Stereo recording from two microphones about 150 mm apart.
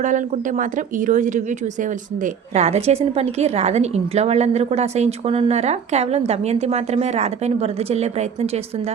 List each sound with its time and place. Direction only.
0.0 s speech: 60° right (ahead or behind)